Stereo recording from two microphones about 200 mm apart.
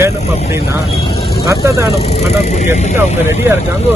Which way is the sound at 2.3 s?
35° left (ahead or behind).